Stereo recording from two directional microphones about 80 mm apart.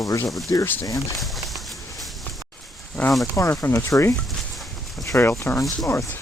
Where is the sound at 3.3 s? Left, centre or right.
Left.